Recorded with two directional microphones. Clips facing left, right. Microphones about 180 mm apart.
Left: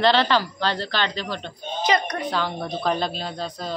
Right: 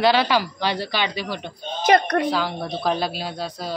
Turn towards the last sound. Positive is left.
turn(degrees=-5)  # may be behind; listen again after turning